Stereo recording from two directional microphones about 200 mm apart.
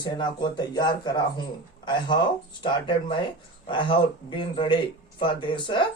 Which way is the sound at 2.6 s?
25° left (ahead or behind).